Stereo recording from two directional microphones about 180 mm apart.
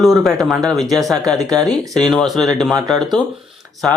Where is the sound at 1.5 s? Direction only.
20° right (ahead or behind).